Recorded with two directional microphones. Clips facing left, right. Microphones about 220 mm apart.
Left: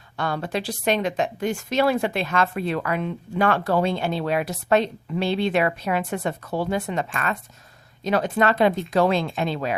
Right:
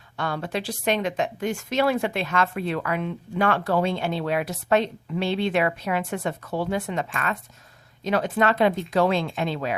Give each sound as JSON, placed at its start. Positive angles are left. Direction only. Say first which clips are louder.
{"t": 0.2, "sound": "a woman's voice", "louder": "left 2 dB", "side_deg": 40}